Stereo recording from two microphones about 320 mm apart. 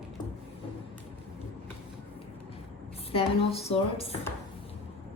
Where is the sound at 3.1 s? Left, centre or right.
Centre.